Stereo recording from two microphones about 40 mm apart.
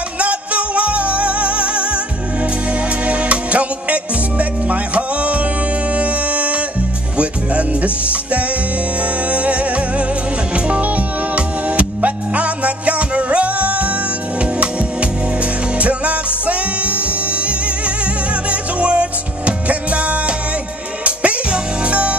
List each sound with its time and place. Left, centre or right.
0.2 s music: right
3.1 s music: right